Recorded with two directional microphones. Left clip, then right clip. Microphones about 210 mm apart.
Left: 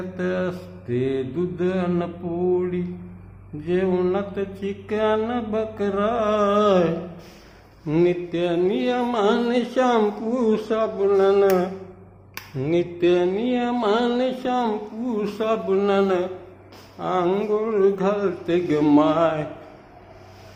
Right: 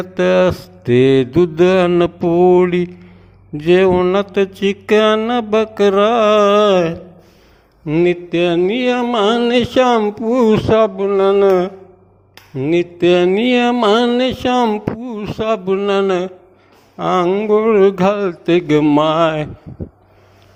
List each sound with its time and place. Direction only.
0.1 s mantra: 45° right (ahead or behind)
17.2 s a sound: 25° right (ahead or behind)
17.6 s mantra: 40° right (ahead or behind)